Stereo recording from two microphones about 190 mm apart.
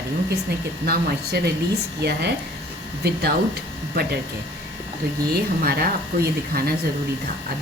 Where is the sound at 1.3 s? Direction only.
60° right (ahead or behind).